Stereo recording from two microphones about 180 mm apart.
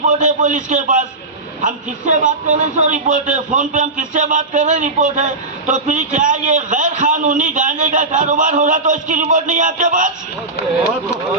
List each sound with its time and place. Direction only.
0.1 s a man's voice: 45° right (ahead or behind)